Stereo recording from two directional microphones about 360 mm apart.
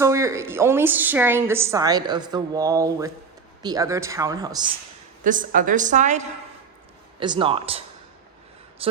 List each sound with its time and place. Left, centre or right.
0.0 s a woman's voice: centre
5.2 s a woman's voice: right